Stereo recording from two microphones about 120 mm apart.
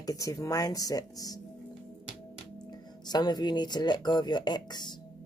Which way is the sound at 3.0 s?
35° left (ahead or behind).